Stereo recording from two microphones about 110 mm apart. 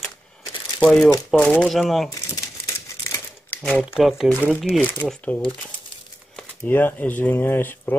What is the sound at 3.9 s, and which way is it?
Speech, 5° right (ahead or behind).